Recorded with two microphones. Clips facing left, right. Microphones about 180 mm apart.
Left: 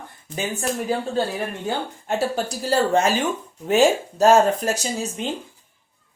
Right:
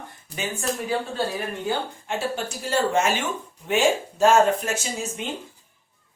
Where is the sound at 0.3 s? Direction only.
35° right (ahead or behind).